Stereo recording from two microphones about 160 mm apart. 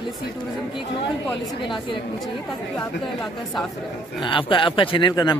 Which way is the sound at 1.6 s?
30° left (ahead or behind).